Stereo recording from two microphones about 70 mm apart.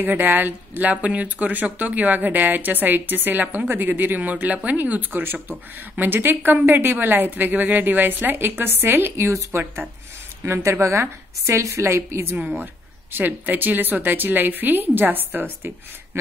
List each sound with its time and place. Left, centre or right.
0.0 s a woman's voice: right
12.4 s speech: centre
13.1 s speech: right